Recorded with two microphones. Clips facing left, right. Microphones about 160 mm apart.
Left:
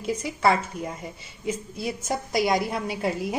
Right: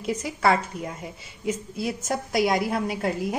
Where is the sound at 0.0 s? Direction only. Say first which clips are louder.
Even; centre (ahead or behind).